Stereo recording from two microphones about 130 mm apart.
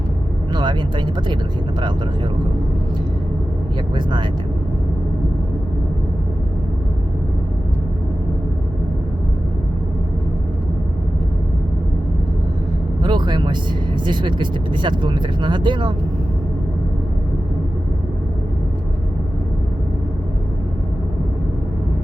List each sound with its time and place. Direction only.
0.5 s speech: 35° right (ahead or behind)
3.9 s speech: 35° right (ahead or behind)
13.0 s speech: 35° right (ahead or behind)